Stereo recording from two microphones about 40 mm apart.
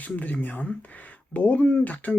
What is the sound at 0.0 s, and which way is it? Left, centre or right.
Speech, left.